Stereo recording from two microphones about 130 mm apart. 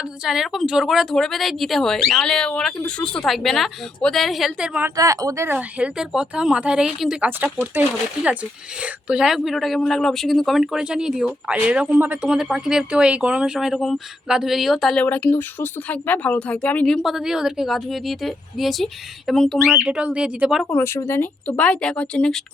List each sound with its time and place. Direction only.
0.3 s speech: centre (ahead or behind)
4.9 s speech: 25° right (ahead or behind)
5.5 s speech: 10° right (ahead or behind)
15.0 s speech: 15° left (ahead or behind)
19.8 s speech: 10° right (ahead or behind)
20.7 s speech: 20° left (ahead or behind)